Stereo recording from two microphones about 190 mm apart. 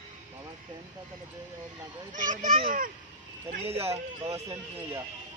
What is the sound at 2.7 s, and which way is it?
Speech, 45° right (ahead or behind).